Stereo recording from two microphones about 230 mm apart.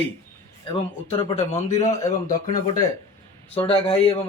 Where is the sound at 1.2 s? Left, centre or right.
Left.